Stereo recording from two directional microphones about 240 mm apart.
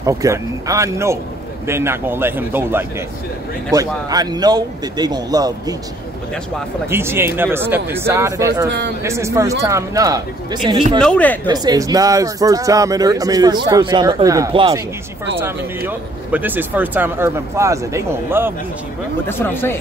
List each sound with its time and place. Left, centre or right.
0.0 s speech: centre
6.9 s speech: centre
11.0 s speech: centre
11.4 s speech: centre
19.2 s speech: centre